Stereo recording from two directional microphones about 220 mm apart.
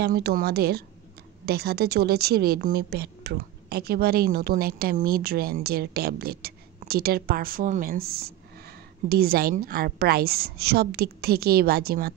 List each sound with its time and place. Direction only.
0.0 s a woman's voice: 45° right (ahead or behind)